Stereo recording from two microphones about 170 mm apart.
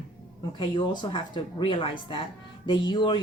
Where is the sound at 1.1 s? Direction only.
25° left (ahead or behind).